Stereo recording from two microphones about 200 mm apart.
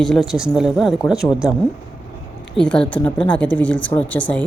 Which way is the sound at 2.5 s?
5° left (ahead or behind).